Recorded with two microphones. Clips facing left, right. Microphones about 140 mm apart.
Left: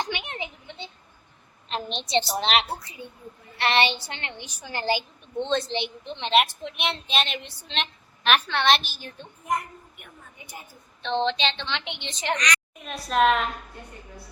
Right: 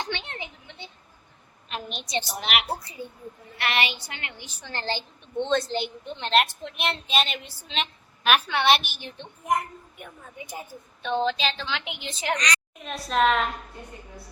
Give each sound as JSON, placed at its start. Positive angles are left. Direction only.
{"t": 0.0, "sound": "a sound", "side_deg": 15}
{"t": 2.4, "sound": "a woman's voice", "side_deg": 30}
{"t": 2.6, "sound": "a child's voice", "side_deg": -35}
{"t": 3.6, "sound": "a woman's voice", "side_deg": 30}
{"t": 4.4, "sound": "a woman's voice", "side_deg": 15}
{"t": 5.4, "sound": "a woman's voice", "side_deg": 0}
{"t": 11.0, "sound": "a woman's voice", "side_deg": -5}